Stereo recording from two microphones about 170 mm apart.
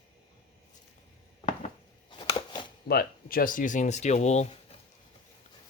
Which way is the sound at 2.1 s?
30° left (ahead or behind).